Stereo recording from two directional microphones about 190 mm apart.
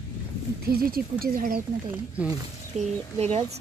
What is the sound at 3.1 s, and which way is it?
Speech, 35° right (ahead or behind).